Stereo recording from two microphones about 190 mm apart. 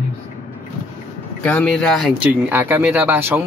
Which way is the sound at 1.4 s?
5° left (ahead or behind).